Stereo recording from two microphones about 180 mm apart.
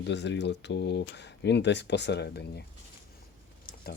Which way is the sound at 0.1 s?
75° left (ahead or behind).